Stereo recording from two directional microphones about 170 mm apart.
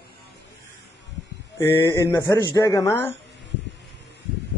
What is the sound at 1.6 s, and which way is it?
Speech, 15° left (ahead or behind).